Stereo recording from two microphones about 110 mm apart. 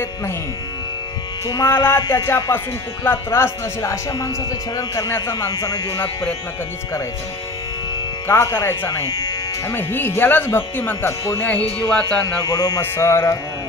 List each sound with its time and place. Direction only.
1.5 s speech: 25° left (ahead or behind)
8.3 s speech: 20° left (ahead or behind)
11.4 s speech: 10° left (ahead or behind)
12.4 s speech: 35° left (ahead or behind)
12.8 s speech: 20° left (ahead or behind)